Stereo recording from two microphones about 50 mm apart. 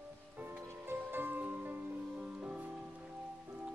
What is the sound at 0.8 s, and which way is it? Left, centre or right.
Music, right.